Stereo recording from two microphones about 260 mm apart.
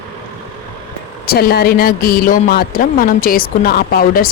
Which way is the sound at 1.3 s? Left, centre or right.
Left.